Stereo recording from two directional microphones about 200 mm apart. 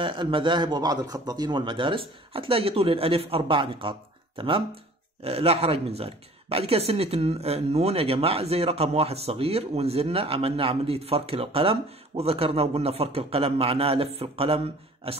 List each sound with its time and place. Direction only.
0.0 s speech: 25° right (ahead or behind)